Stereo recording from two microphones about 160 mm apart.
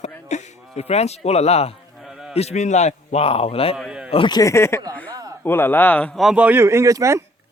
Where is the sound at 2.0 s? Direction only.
Centre (ahead or behind).